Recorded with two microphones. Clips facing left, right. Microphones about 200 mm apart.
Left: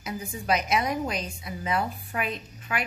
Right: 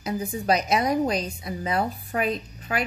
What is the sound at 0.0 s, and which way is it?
A woman's voice, 35° right (ahead or behind).